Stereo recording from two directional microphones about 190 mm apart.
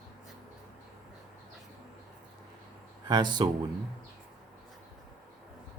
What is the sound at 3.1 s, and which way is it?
Speech, 25° right (ahead or behind).